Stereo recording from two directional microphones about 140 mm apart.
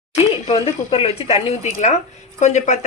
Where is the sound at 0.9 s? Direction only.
45° left (ahead or behind).